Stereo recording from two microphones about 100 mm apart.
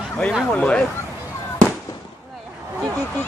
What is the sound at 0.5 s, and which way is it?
Speech, 15° left (ahead or behind).